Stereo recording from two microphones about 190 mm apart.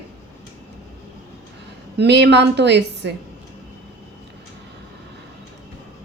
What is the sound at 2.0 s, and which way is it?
Speech, 65° right (ahead or behind).